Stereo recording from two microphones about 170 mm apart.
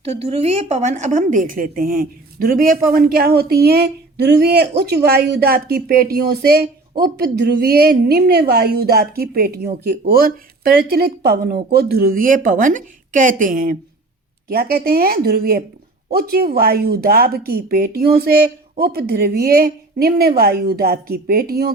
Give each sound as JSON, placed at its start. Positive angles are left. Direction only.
{"t": 0.0, "sound": "a woman's voice", "side_deg": -40}